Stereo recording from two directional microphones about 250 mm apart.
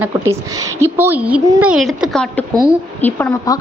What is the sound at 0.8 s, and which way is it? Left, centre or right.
A woman's voice, centre.